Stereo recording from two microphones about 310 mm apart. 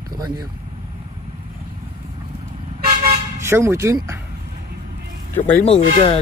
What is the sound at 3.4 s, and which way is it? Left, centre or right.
Speech, centre.